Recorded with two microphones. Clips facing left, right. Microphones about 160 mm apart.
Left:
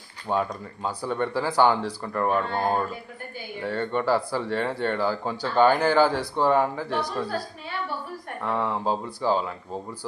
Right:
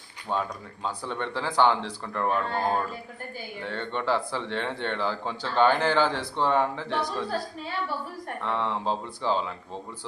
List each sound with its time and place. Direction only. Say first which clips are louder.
0.3 s speech: left 4 dB; 15° left (ahead or behind)
8.4 s speech: left 2 dB; 10° left (ahead or behind)